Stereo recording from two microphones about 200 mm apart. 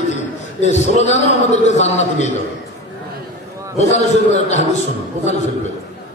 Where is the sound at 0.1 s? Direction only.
35° left (ahead or behind).